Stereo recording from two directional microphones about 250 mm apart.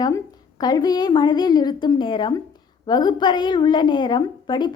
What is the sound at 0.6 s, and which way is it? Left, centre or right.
A woman's voice, centre.